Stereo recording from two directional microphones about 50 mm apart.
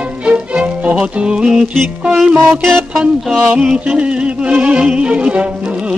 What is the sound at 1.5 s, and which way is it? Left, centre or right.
Music, centre.